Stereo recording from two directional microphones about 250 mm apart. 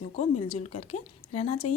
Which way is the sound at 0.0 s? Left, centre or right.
Left.